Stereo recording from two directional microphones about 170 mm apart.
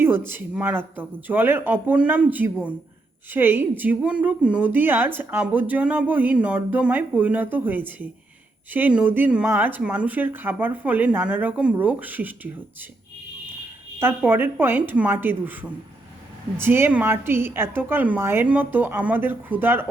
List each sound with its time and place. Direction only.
0.3 s a woman's voice: 10° right (ahead or behind)
14.0 s a woman's voice: 10° right (ahead or behind)